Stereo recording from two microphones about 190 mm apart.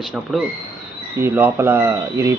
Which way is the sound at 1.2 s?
15° right (ahead or behind).